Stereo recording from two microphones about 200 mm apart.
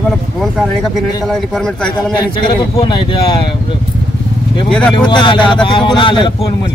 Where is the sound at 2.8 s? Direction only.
25° left (ahead or behind).